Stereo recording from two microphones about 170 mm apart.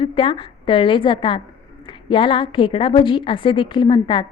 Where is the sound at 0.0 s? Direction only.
30° left (ahead or behind).